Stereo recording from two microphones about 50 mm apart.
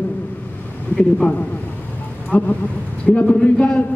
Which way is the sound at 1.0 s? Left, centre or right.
Left.